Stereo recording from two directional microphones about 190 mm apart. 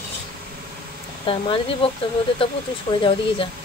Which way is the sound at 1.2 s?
30° left (ahead or behind).